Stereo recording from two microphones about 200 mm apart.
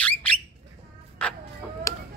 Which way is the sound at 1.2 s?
5° left (ahead or behind).